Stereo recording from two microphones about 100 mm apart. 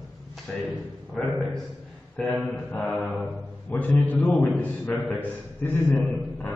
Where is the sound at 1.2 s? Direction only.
5° left (ahead or behind).